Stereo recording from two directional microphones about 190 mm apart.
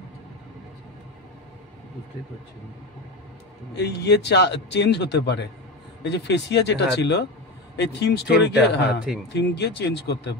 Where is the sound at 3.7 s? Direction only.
65° left (ahead or behind).